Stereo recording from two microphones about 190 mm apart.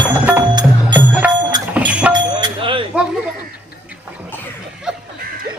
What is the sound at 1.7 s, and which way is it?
Train, 5° right (ahead or behind).